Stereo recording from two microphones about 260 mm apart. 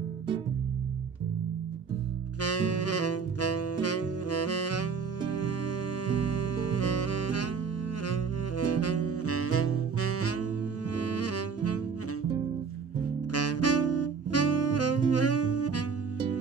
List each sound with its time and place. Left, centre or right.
2.4 s music: left
13.3 s saxophone: left